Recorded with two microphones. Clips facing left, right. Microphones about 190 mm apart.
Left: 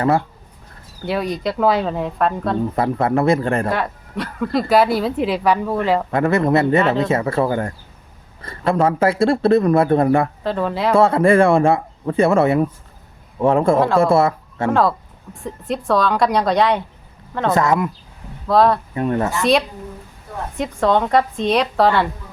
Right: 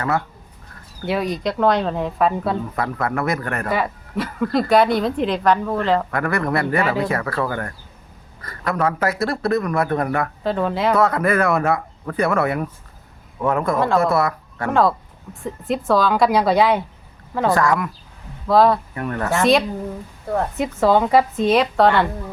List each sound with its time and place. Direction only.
1.0 s speech: centre (ahead or behind)
2.7 s speech: 25° left (ahead or behind)
3.7 s speech: centre (ahead or behind)
6.1 s speech: 25° left (ahead or behind)
10.4 s speech: centre (ahead or behind)
10.9 s speech: 25° left (ahead or behind)
13.7 s speech: centre (ahead or behind)
14.0 s speech: 25° left (ahead or behind)
14.7 s speech: centre (ahead or behind)
17.5 s speech: 20° left (ahead or behind)
18.4 s speech: centre (ahead or behind)
18.9 s speech: 20° left (ahead or behind)
19.4 s speech: centre (ahead or behind)